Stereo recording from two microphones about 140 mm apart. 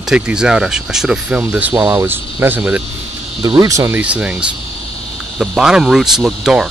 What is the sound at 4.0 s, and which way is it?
Speech, 10° right (ahead or behind).